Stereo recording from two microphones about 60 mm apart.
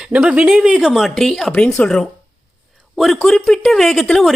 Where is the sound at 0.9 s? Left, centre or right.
Centre.